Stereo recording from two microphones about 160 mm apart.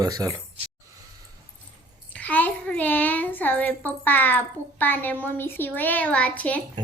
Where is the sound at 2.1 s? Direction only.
10° left (ahead or behind).